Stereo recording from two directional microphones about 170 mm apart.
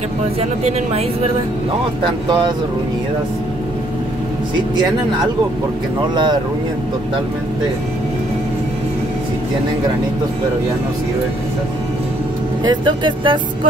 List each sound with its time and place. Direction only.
0.4 s speech: 40° right (ahead or behind)
2.2 s speech: 25° right (ahead or behind)
12.6 s speech: 30° right (ahead or behind)